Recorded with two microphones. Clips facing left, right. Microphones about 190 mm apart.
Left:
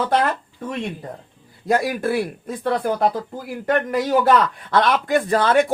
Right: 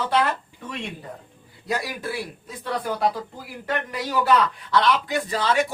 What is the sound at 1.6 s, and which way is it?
A man's voice, 50° left (ahead or behind).